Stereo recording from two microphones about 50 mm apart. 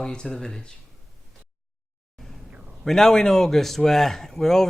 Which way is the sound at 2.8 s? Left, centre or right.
Centre.